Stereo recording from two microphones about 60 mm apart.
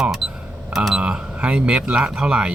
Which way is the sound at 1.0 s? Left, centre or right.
Centre.